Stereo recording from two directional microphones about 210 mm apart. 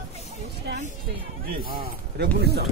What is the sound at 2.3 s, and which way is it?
Music, 50° right (ahead or behind).